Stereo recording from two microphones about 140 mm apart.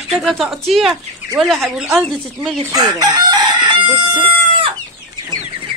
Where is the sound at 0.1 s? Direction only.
Centre (ahead or behind).